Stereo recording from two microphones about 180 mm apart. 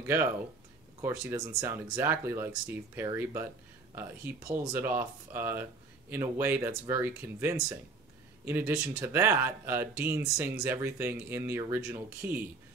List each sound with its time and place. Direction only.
0.0 s speech: 10° right (ahead or behind)
1.6 s speech: 15° right (ahead or behind)